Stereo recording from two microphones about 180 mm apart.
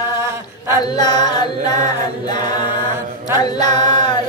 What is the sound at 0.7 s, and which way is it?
Carnatic music, 25° left (ahead or behind).